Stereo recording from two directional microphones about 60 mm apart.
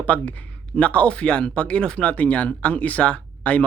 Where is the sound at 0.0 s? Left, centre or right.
Left.